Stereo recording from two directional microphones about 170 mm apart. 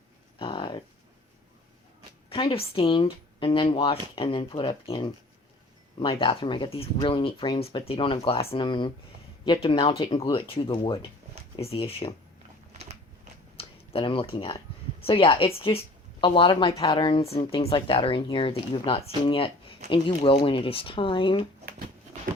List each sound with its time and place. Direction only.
0.3 s a sound: 30° left (ahead or behind)
2.3 s speech: 35° left (ahead or behind)
12.7 s biting: 40° right (ahead or behind)
13.6 s speech: 30° left (ahead or behind)